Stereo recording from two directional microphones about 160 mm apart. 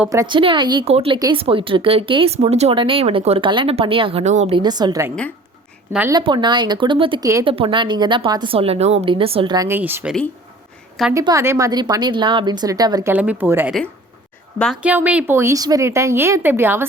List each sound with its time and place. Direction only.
0.1 s a woman's voice: 20° right (ahead or behind)
0.3 s speech: 30° right (ahead or behind)
4.5 s a woman's voice: 25° right (ahead or behind)
6.1 s a woman's voice: 25° right (ahead or behind)
9.6 s a woman's voice: 15° right (ahead or behind)
11.1 s a woman's voice: 20° right (ahead or behind)
13.1 s a woman's voice: 10° right (ahead or behind)
14.8 s a woman's voice: 10° right (ahead or behind)